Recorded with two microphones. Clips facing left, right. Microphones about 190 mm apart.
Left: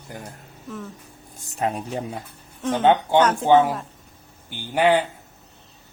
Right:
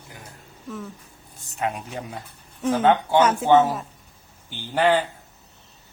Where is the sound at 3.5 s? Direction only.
15° left (ahead or behind).